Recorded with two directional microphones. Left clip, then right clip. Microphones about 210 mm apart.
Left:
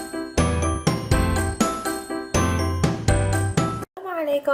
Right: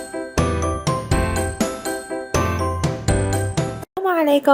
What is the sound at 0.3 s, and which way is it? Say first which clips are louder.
Music: right 2 dB; centre (ahead or behind).